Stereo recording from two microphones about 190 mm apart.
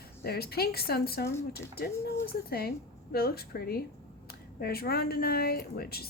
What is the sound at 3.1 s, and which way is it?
A woman's voice, 55° left (ahead or behind).